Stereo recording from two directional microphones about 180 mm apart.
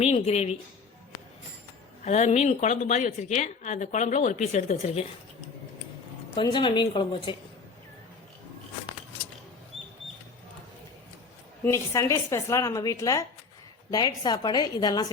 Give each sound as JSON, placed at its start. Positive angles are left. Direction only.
{"t": 0.0, "sound": "a woman's voice", "side_deg": 35}
{"t": 2.0, "sound": "a woman's voice", "side_deg": 40}
{"t": 6.3, "sound": "a woman's voice", "side_deg": 25}
{"t": 11.6, "sound": "a woman's voice", "side_deg": 15}